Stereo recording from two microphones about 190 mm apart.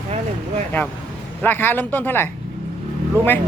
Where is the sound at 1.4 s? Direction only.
10° left (ahead or behind).